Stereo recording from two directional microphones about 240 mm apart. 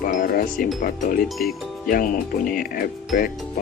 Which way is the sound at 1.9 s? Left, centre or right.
Left.